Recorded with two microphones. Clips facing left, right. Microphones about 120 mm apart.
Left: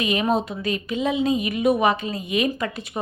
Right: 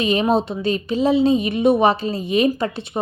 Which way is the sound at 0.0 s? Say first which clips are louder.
Right 4 dB; 30° right (ahead or behind).